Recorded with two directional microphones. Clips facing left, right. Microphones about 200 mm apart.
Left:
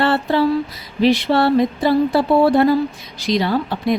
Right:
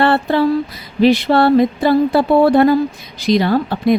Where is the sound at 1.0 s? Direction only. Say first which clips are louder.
Right 3 dB; 55° right (ahead or behind).